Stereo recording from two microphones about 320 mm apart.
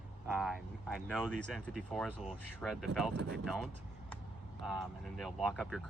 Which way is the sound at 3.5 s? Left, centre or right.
Centre.